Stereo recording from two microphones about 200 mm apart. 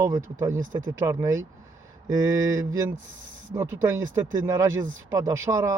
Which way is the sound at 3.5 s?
15° right (ahead or behind).